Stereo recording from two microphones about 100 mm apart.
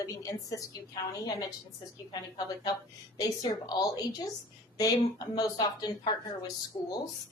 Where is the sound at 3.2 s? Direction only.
40° left (ahead or behind).